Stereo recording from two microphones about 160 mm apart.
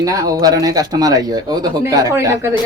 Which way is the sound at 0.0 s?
20° right (ahead or behind).